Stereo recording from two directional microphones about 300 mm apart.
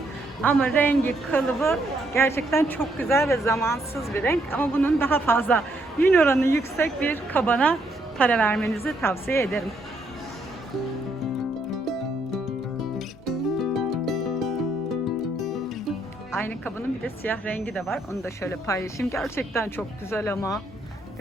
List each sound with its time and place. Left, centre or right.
0.4 s a woman's voice: centre
11.7 s music: centre
16.3 s a woman's voice: centre